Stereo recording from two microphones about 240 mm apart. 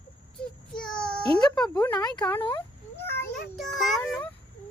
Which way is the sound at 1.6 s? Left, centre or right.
Centre.